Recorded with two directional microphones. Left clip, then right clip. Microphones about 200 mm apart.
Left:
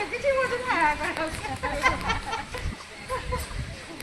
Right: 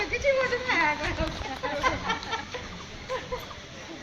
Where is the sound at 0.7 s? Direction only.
30° left (ahead or behind).